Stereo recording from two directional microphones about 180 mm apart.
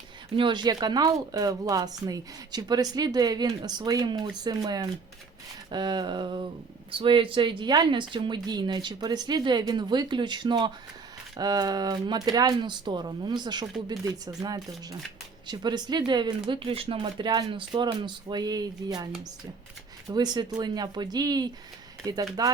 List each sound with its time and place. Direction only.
0.3 s speech: 25° right (ahead or behind)
20.1 s speech: 25° right (ahead or behind)